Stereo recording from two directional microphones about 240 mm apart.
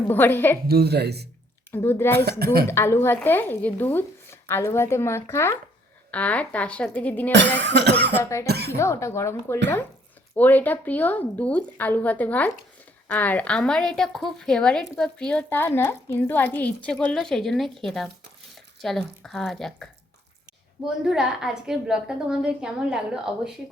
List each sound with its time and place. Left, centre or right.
0.1 s speech: centre
0.7 s speech: right
1.7 s speech: centre
2.4 s a woman's voice: right
2.6 s a woman's voice: centre
7.3 s speech: right
8.2 s speech: centre
8.4 s speech: right
8.8 s a woman's voice: centre